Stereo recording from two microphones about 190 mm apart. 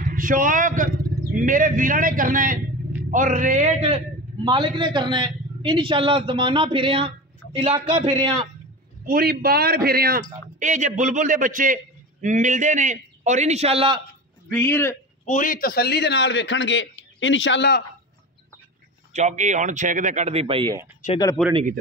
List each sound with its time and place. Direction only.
0.0 s a man's voice: 45° right (ahead or behind)
4.5 s a man's voice: 25° right (ahead or behind)
9.0 s a man's voice: 50° right (ahead or behind)
10.6 s a man's voice: 40° right (ahead or behind)
14.5 s a man's voice: 10° left (ahead or behind)
15.2 s a man's voice: 45° left (ahead or behind); by 17.8 s 60° left (ahead or behind)
19.1 s a man's voice: 40° right (ahead or behind)
21.0 s speech: 40° left (ahead or behind)